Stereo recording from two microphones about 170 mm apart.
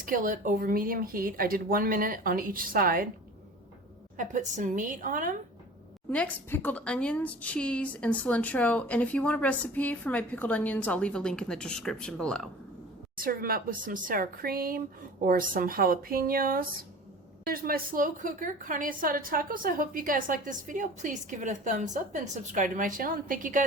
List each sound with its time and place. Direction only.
0.0 s speech: 50° right (ahead or behind)
4.2 s a woman's voice: 45° right (ahead or behind)
6.1 s a woman's voice: 10° left (ahead or behind)
13.1 s a woman's voice: 60° right (ahead or behind)